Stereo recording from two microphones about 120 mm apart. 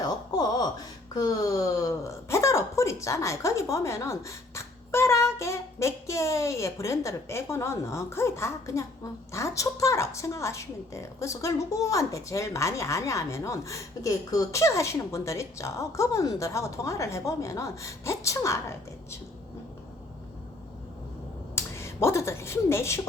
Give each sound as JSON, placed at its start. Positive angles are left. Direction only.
{"t": 0.0, "sound": "a sound", "side_deg": 35}
{"t": 1.8, "sound": "a woman's voice", "side_deg": 25}
{"t": 21.5, "sound": "speech", "side_deg": 20}